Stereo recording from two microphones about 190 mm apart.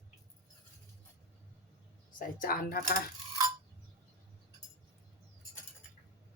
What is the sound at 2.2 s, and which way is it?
Cutlery, 45° left (ahead or behind).